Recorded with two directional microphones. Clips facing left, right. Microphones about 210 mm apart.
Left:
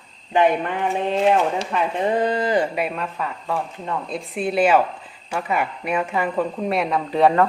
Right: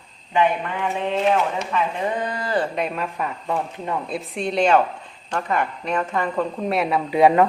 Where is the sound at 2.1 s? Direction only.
30° left (ahead or behind); by 3.0 s 5° left (ahead or behind).